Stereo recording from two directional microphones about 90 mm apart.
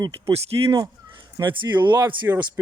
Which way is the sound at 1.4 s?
60° right (ahead or behind).